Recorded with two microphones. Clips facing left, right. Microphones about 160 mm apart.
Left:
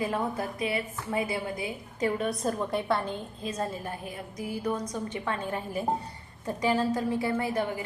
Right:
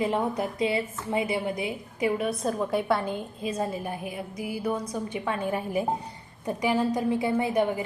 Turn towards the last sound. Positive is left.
turn(degrees=-20)  # may be behind; listen again after turning